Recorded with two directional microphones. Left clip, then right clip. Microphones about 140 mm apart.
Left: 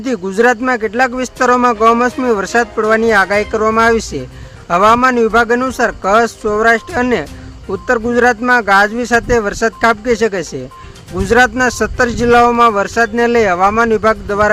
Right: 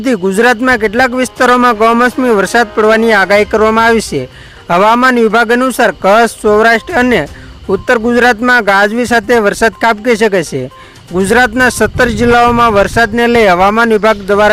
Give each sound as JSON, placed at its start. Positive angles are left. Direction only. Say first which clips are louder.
{"t": 0.0, "sound": "a man's voice", "louder": "right 3 dB", "side_deg": -45}